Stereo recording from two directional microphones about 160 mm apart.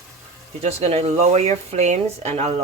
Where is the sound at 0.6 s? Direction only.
40° right (ahead or behind).